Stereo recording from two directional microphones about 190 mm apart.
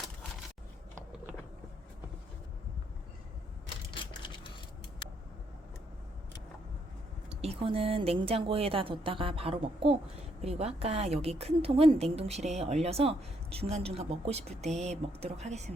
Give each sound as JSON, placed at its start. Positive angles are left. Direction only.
{"t": 7.4, "sound": "a woman's voice", "side_deg": -30}